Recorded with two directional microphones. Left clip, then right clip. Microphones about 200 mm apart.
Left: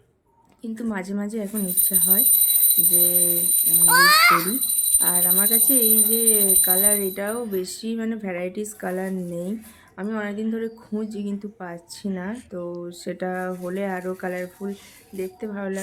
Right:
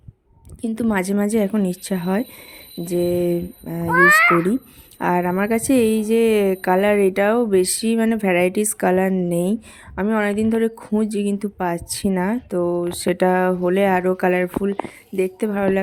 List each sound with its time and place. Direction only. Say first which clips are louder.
0.6 s speech: right 8 dB; 40° right (ahead or behind)
3.9 s a child's voice: right 2 dB; 20° right (ahead or behind)
4.9 s speech: right 9 dB; 45° right (ahead or behind)